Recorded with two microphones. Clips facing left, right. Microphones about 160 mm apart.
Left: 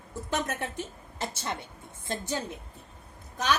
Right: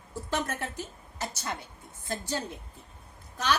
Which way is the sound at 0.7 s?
25° left (ahead or behind).